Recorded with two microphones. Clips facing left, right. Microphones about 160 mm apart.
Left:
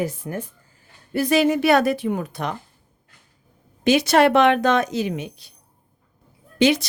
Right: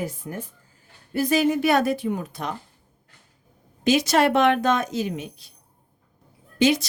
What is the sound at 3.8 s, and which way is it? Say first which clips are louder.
Speech: left 3 dB; 65° left (ahead or behind).